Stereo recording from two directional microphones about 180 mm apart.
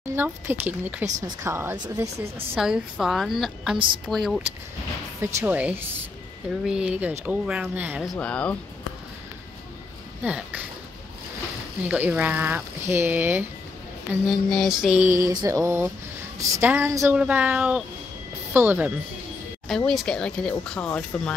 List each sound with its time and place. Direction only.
0.1 s speech: 10° right (ahead or behind)
2.5 s a woman's voice: 5° right (ahead or behind)
3.7 s a woman's voice: 30° right (ahead or behind)
4.1 s a woman's voice: centre (ahead or behind)
8.1 s speech: 5° left (ahead or behind)
10.2 s speech: 5° right (ahead or behind)
11.9 s speech: 10° right (ahead or behind)
14.2 s a woman's voice: centre (ahead or behind)
15.0 s speech: 15° right (ahead or behind)
19.9 s a woman's voice: centre (ahead or behind)